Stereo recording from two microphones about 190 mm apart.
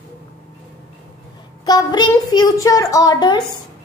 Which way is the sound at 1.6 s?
20° left (ahead or behind).